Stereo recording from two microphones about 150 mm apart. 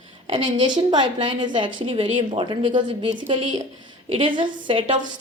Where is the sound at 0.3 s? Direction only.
35° right (ahead or behind).